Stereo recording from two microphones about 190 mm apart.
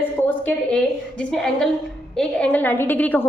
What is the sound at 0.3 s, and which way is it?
A woman's voice, 10° left (ahead or behind).